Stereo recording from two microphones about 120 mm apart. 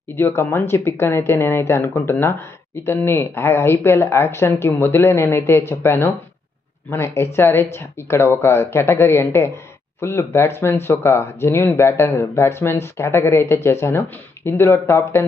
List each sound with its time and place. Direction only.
0.2 s speech: 20° left (ahead or behind)